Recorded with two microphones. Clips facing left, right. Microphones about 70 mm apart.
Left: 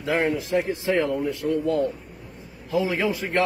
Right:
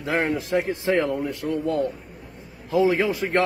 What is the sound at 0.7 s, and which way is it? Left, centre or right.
A man's voice, right.